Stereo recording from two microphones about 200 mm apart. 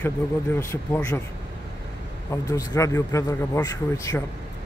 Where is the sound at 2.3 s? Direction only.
15° left (ahead or behind).